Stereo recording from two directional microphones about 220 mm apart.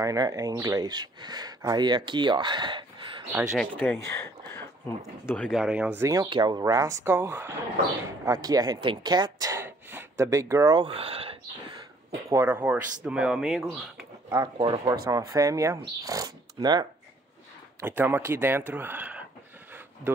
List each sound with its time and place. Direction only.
0.0 s speech: 15° right (ahead or behind)
3.5 s speech: 5° left (ahead or behind); by 11.3 s 25° right (ahead or behind)
12.3 s speech: 10° right (ahead or behind)
14.3 s speech: 20° right (ahead or behind)